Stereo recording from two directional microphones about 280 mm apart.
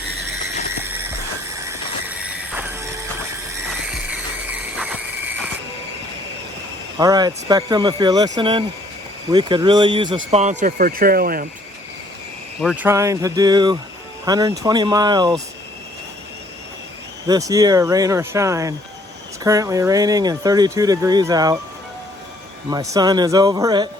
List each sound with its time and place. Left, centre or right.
0.7 s music: centre
1.5 s vehicle: centre
4.1 s a sound: centre
7.0 s speech: centre; by 11.4 s right
12.6 s speech: centre
17.2 s speech: centre
22.7 s speech: centre